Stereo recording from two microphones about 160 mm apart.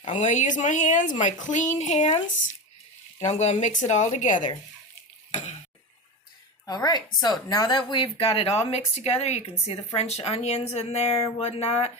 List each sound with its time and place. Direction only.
0.0 s speech: 45° left (ahead or behind)
3.2 s speech: 45° left (ahead or behind)
5.3 s a sound: 50° left (ahead or behind)
6.7 s a woman's voice: 25° left (ahead or behind); by 11.9 s 40° left (ahead or behind)